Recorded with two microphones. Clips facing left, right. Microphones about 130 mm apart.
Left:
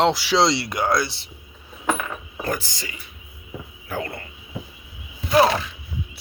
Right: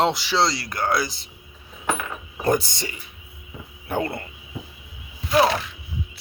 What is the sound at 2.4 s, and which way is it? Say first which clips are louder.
Speech: right 7 dB; 30° right (ahead or behind).